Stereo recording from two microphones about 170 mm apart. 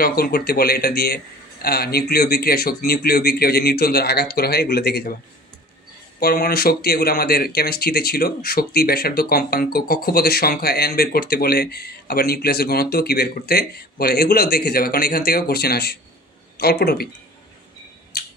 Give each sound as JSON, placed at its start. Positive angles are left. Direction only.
{"t": 0.0, "sound": "speech", "side_deg": 60}
{"t": 6.1, "sound": "speech", "side_deg": 60}
{"t": 18.1, "sound": "a sound", "side_deg": 70}